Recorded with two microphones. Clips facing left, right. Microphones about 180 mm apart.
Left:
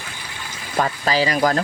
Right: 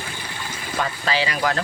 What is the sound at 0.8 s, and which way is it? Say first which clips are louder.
Speech: left 4 dB; 40° left (ahead or behind).